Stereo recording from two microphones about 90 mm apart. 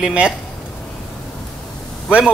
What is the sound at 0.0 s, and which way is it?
Speech, 10° right (ahead or behind).